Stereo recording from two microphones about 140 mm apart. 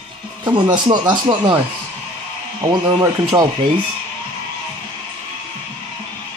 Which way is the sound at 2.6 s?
30° right (ahead or behind).